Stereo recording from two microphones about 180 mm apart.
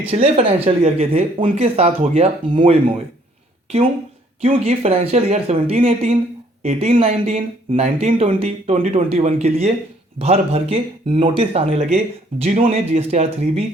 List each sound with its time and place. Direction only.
0.1 s speech: 35° right (ahead or behind)
4.4 s speech: 35° right (ahead or behind)